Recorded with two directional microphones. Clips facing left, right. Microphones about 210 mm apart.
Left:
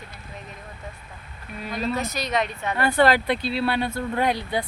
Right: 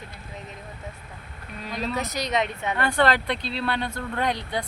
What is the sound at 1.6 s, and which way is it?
Speech, centre (ahead or behind).